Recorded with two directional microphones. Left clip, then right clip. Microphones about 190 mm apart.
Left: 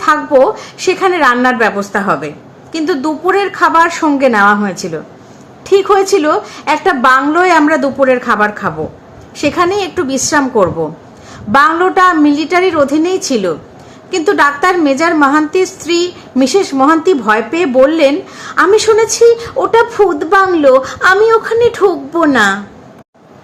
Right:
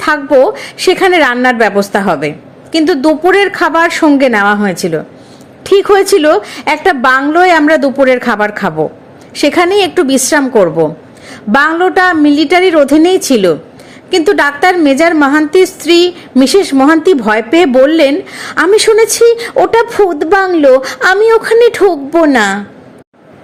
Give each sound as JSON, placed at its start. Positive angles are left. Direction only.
{"t": 0.0, "sound": "a woman's voice", "side_deg": -25}